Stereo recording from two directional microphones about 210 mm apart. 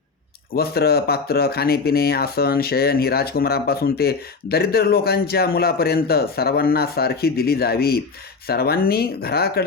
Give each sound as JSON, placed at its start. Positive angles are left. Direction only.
{"t": 0.5, "sound": "speech", "side_deg": 50}